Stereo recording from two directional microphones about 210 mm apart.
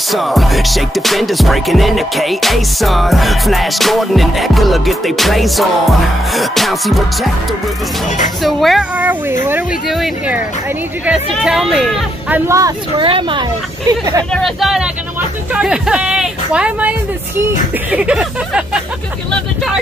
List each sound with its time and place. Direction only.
0.1 s music: centre (ahead or behind)
8.4 s music: centre (ahead or behind)
12.4 s speech: 15° right (ahead or behind)
14.3 s music: centre (ahead or behind)
17.9 s music: 5° right (ahead or behind)